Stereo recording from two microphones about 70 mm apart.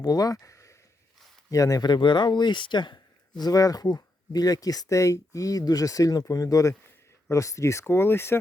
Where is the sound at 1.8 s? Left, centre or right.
Left.